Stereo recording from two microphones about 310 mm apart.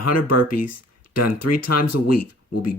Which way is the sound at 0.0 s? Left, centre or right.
Left.